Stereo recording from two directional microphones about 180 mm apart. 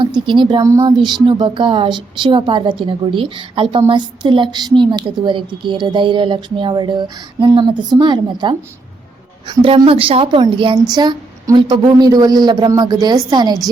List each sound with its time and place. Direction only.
0.0 s a woman's voice: 25° right (ahead or behind)